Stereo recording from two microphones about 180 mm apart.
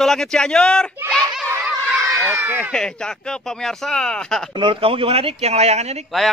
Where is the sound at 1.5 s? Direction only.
Centre (ahead or behind).